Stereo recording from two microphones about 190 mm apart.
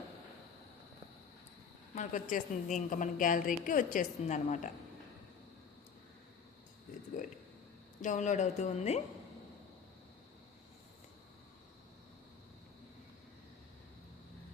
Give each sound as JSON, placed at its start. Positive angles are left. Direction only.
{"t": 2.0, "sound": "a woman's voice", "side_deg": 40}
{"t": 8.0, "sound": "speech", "side_deg": 40}